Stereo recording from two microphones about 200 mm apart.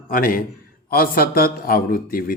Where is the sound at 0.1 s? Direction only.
45° left (ahead or behind).